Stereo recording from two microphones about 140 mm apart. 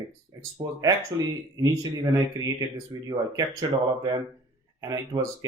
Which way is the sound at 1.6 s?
25° right (ahead or behind).